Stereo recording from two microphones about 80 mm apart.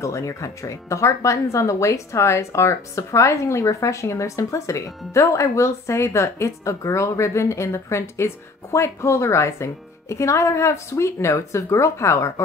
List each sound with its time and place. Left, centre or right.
0.0 s speech: left